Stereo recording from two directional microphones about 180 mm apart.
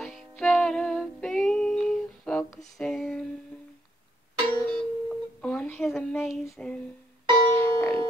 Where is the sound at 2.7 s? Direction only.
Centre (ahead or behind).